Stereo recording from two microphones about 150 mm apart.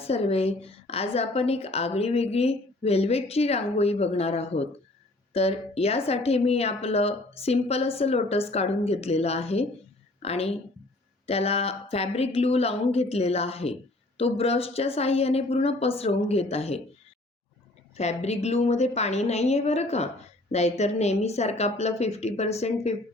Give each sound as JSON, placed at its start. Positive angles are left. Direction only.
{"t": 0.0, "sound": "a woman's voice", "side_deg": 40}
{"t": 17.9, "sound": "a woman's voice", "side_deg": 45}